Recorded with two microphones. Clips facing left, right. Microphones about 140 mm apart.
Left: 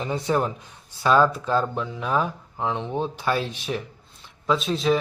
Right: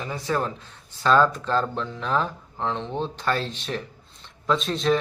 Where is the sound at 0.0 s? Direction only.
20° left (ahead or behind).